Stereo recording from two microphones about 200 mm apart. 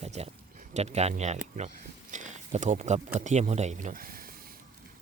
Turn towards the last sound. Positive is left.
turn(degrees=-45)  # may be behind; listen again after turning